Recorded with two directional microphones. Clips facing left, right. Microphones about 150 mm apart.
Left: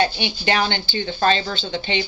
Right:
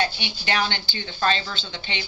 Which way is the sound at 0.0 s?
30° left (ahead or behind).